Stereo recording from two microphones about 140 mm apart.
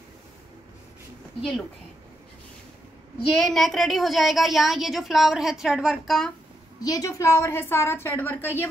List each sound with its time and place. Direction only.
3.3 s a woman's voice: centre (ahead or behind)
6.8 s a woman's voice: 25° left (ahead or behind)